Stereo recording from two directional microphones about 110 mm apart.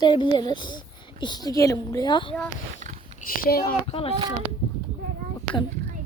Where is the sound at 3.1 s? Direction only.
90° right.